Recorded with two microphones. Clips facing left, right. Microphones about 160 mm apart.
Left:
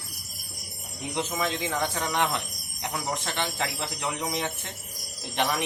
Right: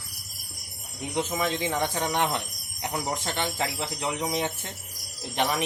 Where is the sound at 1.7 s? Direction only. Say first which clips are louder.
Right 1 dB; 25° right (ahead or behind).